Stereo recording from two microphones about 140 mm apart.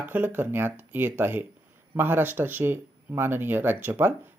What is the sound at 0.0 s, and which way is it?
Speech, 15° right (ahead or behind).